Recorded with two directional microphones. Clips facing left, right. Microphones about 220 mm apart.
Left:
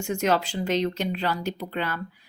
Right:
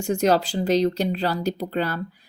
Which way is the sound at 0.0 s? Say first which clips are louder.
Right 4 dB; 35° right (ahead or behind).